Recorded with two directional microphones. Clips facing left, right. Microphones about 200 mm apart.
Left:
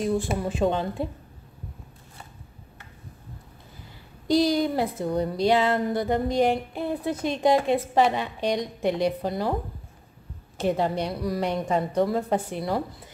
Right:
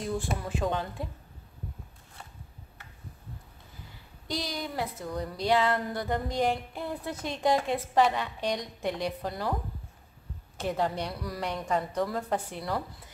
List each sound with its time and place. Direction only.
0.4 s a woman's voice: 25° left (ahead or behind)
4.3 s a woman's voice: 30° left (ahead or behind)
10.6 s a woman's voice: 20° left (ahead or behind)